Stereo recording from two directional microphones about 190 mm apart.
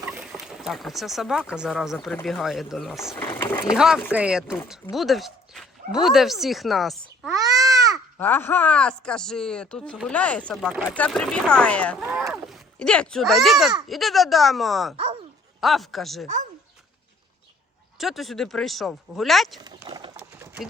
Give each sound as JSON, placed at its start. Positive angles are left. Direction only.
{"t": 0.0, "sound": "boat", "side_deg": -5}
{"t": 1.5, "sound": "speech", "side_deg": -5}
{"t": 3.2, "sound": "speech", "side_deg": 10}
{"t": 3.8, "sound": "speech", "side_deg": -5}
{"t": 7.3, "sound": "a sound", "side_deg": -20}
{"t": 8.2, "sound": "speech", "side_deg": 10}
{"t": 12.0, "sound": "a child's voice", "side_deg": -5}
{"t": 14.9, "sound": "dog", "side_deg": -30}
{"t": 15.6, "sound": "speech", "side_deg": 0}
{"t": 16.2, "sound": "speech", "side_deg": -40}
{"t": 17.9, "sound": "speech", "side_deg": 0}
{"t": 19.5, "sound": "a sound", "side_deg": -20}